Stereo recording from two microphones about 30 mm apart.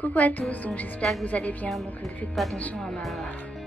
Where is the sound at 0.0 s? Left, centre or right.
Left.